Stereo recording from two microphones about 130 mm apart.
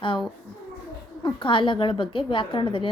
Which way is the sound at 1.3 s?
40° left (ahead or behind).